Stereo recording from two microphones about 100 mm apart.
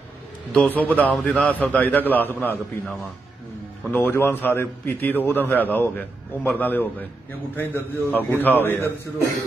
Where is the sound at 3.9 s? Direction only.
20° left (ahead or behind).